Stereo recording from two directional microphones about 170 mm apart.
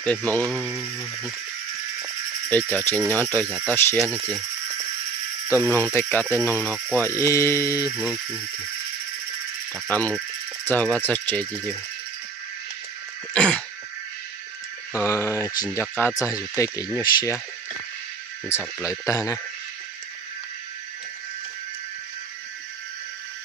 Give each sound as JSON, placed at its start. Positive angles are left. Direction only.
{"t": 0.5, "sound": "speech", "side_deg": -5}
{"t": 2.5, "sound": "speech", "side_deg": 10}
{"t": 4.1, "sound": "speech", "side_deg": -15}
{"t": 5.5, "sound": "speech", "side_deg": 15}
{"t": 7.9, "sound": "speech", "side_deg": 5}
{"t": 9.7, "sound": "speech", "side_deg": 5}
{"t": 13.3, "sound": "a sound", "side_deg": 5}
{"t": 14.9, "sound": "speech", "side_deg": 15}
{"t": 18.8, "sound": "speech", "side_deg": 20}